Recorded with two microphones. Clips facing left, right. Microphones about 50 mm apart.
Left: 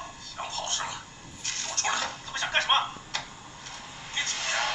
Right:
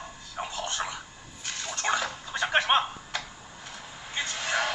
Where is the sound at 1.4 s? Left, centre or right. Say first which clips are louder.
Even; centre.